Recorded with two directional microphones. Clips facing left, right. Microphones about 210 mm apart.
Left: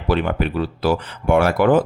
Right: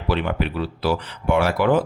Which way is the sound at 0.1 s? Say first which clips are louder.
Left 3 dB; 45° left (ahead or behind).